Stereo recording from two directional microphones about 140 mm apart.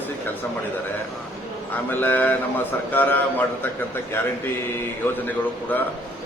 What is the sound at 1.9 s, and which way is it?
A man's voice, 15° left (ahead or behind).